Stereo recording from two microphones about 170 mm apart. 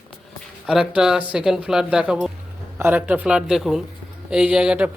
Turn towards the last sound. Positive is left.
turn(degrees=-5)  # may be behind; listen again after turning